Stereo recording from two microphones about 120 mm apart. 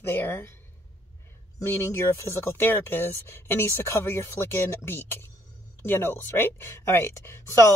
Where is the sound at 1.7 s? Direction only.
20° left (ahead or behind).